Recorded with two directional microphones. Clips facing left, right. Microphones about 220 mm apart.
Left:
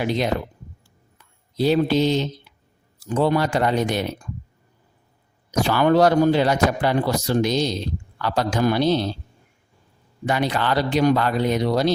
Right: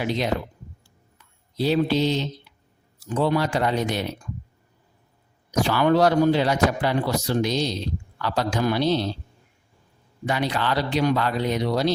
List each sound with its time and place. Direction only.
0.0 s a man's voice: 50° left (ahead or behind)
1.5 s a man's voice: 50° left (ahead or behind)
5.5 s a man's voice: 50° left (ahead or behind)
10.2 s a man's voice: 50° left (ahead or behind)